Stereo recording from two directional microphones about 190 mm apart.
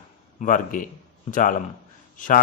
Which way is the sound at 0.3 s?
45° left (ahead or behind).